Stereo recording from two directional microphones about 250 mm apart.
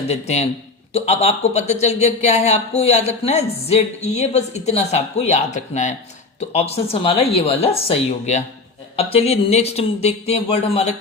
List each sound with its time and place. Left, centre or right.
0.1 s speech: left